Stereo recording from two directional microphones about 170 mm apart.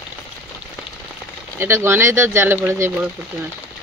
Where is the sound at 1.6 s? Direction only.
15° right (ahead or behind).